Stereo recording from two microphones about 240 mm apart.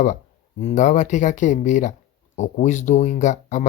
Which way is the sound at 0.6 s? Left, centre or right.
Left.